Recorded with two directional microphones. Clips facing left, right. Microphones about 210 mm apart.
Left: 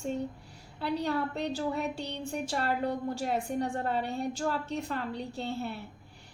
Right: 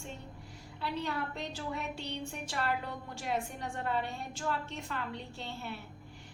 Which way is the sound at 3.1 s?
35° left (ahead or behind).